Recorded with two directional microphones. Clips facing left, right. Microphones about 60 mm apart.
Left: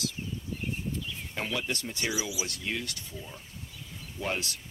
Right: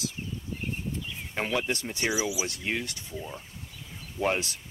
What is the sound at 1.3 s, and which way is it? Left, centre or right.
Speech, right.